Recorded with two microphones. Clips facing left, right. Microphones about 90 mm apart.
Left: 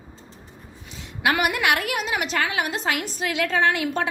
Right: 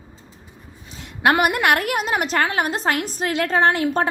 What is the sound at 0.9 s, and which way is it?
A woman's voice, 50° right (ahead or behind).